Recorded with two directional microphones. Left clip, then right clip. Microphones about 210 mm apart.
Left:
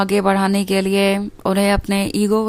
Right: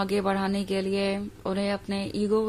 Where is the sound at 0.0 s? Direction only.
30° left (ahead or behind).